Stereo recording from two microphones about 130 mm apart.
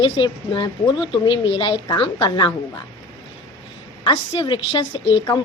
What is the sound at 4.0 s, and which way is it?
A woman's voice, 35° left (ahead or behind).